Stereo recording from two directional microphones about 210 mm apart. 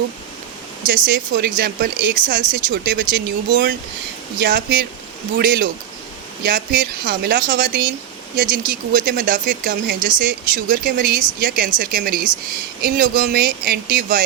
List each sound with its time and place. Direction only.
0.9 s speech: 40° right (ahead or behind)